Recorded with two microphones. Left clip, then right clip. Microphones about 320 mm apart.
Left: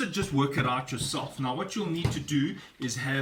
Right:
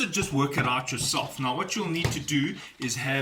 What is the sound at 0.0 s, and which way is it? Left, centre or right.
Speech, centre.